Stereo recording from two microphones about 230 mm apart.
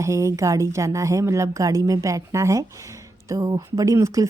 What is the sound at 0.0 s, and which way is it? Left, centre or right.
Speech, centre.